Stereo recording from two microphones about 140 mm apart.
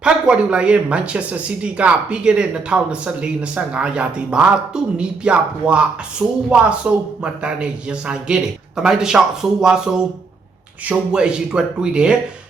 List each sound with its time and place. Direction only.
0.0 s a man's voice: 10° right (ahead or behind)